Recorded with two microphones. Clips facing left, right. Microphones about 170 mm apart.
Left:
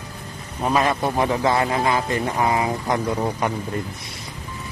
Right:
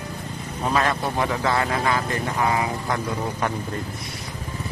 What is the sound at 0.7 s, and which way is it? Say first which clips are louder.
A man's voice: left 3 dB; 15° left (ahead or behind).